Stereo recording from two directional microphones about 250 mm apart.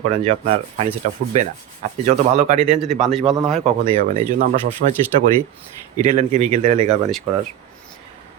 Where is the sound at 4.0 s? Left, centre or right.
Right.